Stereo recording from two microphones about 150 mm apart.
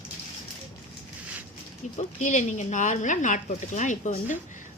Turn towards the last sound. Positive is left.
turn(degrees=55)  # may be behind; listen again after turning